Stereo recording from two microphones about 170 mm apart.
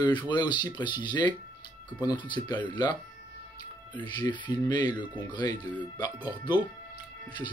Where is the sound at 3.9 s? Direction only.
25° left (ahead or behind).